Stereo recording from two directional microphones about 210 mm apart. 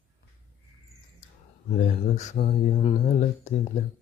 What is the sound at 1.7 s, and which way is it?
Speech, 35° left (ahead or behind).